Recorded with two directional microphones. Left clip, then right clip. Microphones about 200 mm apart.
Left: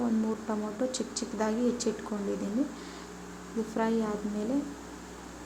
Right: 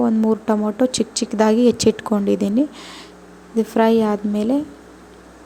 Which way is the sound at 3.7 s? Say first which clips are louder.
Right 14 dB; 45° right (ahead or behind).